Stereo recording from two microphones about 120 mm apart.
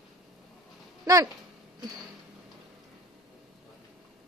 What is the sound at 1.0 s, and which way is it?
Speech, 30° right (ahead or behind).